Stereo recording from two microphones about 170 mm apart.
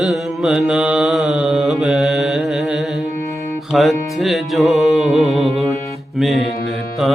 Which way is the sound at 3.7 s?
Centre (ahead or behind).